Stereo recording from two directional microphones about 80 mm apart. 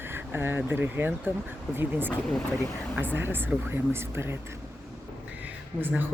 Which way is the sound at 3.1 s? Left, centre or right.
Right.